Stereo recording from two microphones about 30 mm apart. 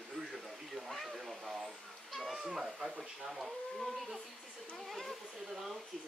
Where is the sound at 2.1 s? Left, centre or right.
Centre.